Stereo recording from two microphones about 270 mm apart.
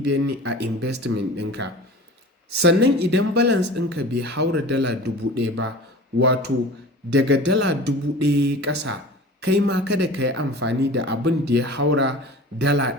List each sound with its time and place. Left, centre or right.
0.1 s speech: right
7.1 s speech: right